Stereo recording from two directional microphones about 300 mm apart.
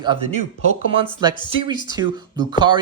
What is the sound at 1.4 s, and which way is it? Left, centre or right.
A man's voice, centre.